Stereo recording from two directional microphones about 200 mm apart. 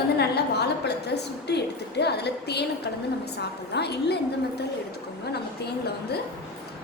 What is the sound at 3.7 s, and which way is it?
Speech, 55° left (ahead or behind).